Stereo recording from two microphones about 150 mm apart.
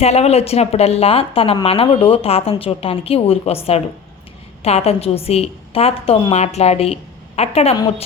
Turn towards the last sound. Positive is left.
turn(degrees=45)  # may be behind; listen again after turning